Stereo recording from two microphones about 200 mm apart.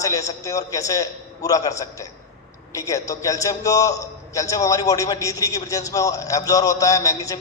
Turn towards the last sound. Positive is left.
turn(degrees=15)  # may be behind; listen again after turning